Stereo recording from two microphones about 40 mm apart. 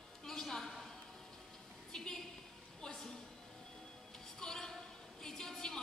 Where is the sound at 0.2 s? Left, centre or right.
Centre.